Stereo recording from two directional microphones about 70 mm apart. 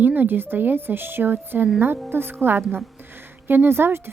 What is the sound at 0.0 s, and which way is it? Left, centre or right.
A woman's voice, right.